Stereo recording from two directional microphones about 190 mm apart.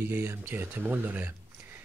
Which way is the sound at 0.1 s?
10° right (ahead or behind).